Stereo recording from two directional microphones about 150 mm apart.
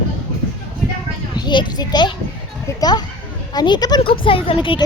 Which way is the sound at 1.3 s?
30° left (ahead or behind).